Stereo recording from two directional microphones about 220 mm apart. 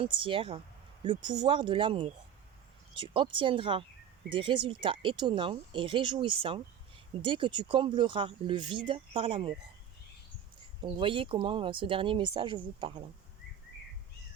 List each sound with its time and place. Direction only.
0.0 s speech: 25° right (ahead or behind)
10.8 s speech: 20° right (ahead or behind)